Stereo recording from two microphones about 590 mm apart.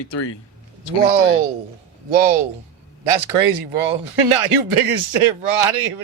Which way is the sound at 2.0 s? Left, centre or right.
Right.